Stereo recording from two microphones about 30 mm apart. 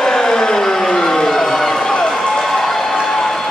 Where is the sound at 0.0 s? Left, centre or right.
Centre.